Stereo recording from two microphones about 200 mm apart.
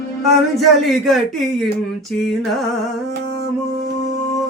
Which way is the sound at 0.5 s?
Centre (ahead or behind).